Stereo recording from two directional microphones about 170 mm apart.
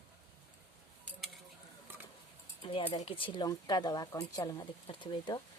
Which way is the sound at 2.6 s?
30° left (ahead or behind).